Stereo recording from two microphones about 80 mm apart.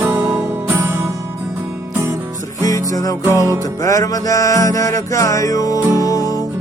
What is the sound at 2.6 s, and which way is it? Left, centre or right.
Music, left.